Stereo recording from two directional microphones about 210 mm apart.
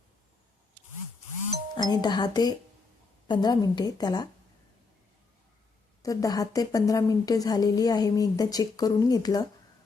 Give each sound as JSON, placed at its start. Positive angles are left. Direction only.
{"t": 1.7, "sound": "a woman's voice", "side_deg": 20}
{"t": 6.0, "sound": "a woman's voice", "side_deg": 15}